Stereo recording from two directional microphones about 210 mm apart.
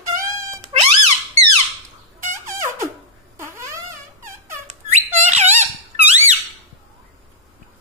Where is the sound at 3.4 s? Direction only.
15° right (ahead or behind).